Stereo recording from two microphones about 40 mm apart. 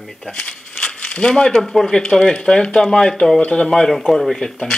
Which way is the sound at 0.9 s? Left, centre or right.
Left.